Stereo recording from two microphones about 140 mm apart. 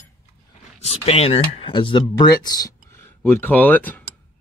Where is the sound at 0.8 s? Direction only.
45° left (ahead or behind); by 4.0 s 10° left (ahead or behind).